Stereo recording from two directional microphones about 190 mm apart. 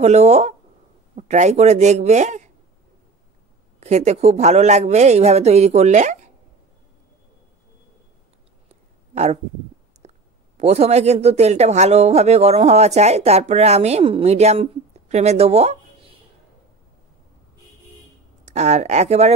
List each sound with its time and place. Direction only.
0.0 s a man's voice: 35° right (ahead or behind)
3.8 s a man's voice: 35° right (ahead or behind)
9.1 s speech: 35° right (ahead or behind)
10.0 s a sound: 35° right (ahead or behind)
10.6 s a man's voice: 35° right (ahead or behind)
18.5 s a man's voice: 35° right (ahead or behind)